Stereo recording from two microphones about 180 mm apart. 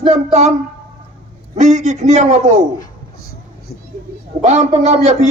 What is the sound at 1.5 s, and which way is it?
A man's voice, 40° right (ahead or behind).